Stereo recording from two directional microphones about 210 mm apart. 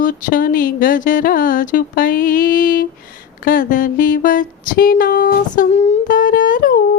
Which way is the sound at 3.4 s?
40° left (ahead or behind).